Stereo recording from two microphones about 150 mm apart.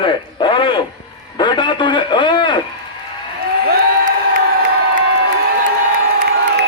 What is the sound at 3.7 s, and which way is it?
Crowd, 70° right (ahead or behind).